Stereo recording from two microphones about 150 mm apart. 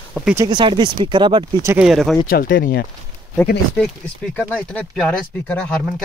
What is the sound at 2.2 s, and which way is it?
Speech, 80° left.